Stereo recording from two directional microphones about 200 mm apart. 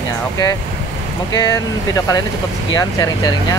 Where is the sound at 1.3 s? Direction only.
15° left (ahead or behind).